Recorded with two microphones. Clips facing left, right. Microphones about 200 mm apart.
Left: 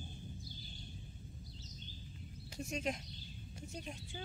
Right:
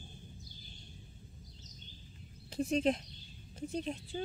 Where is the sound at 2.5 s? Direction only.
35° right (ahead or behind).